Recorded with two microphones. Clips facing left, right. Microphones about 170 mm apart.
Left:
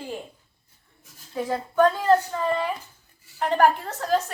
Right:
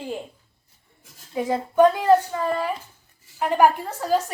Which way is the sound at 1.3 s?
20° right (ahead or behind).